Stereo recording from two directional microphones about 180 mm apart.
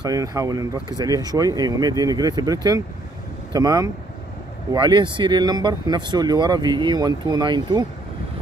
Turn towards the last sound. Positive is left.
turn(degrees=-25)  # may be behind; listen again after turning